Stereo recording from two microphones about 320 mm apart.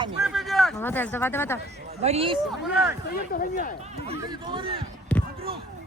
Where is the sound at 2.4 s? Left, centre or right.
Centre.